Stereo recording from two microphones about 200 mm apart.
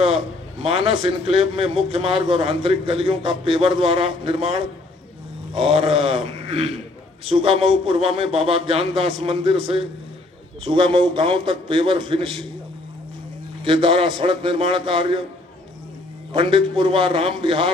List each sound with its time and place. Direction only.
0.0 s a man's voice: 25° right (ahead or behind)
13.7 s a man's voice: 25° right (ahead or behind)
16.3 s a man's voice: 25° right (ahead or behind)